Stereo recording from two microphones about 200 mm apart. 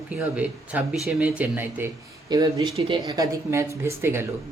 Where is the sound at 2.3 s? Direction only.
20° right (ahead or behind).